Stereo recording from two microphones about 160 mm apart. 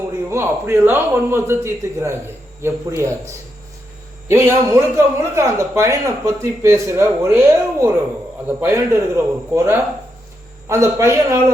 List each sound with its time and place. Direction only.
0.3 s a man's voice: 15° right (ahead or behind)